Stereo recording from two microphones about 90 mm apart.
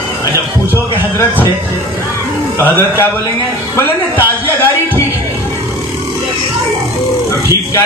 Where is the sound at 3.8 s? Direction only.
25° left (ahead or behind).